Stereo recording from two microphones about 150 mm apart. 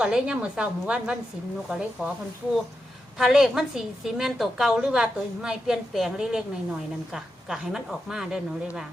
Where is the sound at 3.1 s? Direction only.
Centre (ahead or behind).